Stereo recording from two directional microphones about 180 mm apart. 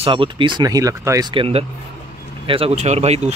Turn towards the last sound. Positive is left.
turn(degrees=-35)  # may be behind; listen again after turning